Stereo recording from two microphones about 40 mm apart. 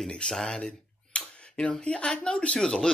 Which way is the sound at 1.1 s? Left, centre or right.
Left.